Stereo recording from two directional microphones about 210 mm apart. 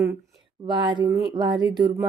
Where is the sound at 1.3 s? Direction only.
20° right (ahead or behind).